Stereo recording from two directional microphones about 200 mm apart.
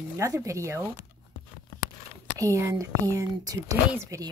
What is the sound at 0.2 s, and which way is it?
Speech, 15° right (ahead or behind).